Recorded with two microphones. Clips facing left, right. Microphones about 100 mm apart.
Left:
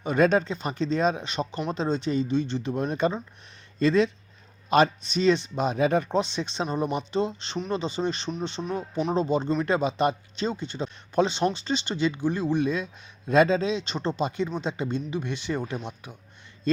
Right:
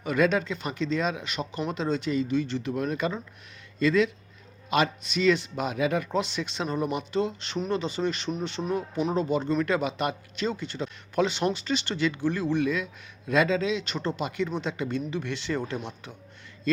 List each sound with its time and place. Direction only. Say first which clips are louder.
0.0 s speech: left 3 dB; 30° left (ahead or behind)
8.6 s speech: right 1 dB; 5° left (ahead or behind)
9.1 s speech: left 1 dB; 25° left (ahead or behind)